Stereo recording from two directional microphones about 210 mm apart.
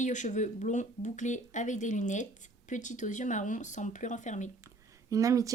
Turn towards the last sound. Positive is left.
turn(degrees=-15)  # may be behind; listen again after turning